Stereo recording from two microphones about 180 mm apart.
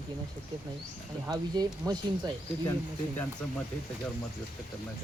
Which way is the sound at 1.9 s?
20° right (ahead or behind).